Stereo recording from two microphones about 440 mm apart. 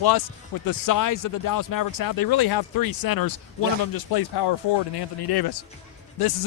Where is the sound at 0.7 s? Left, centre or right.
Left.